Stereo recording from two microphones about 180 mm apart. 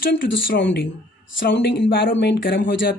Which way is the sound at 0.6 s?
65° left (ahead or behind).